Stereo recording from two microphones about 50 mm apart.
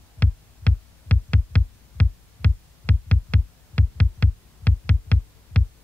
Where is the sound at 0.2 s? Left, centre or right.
Left.